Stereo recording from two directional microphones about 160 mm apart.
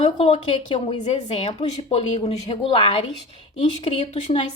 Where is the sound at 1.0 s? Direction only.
45° left (ahead or behind).